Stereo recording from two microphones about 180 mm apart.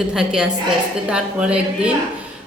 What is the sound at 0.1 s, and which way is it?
A man's voice, 5° right (ahead or behind).